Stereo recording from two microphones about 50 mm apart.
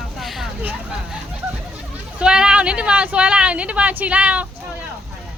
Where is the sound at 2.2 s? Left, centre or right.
Centre.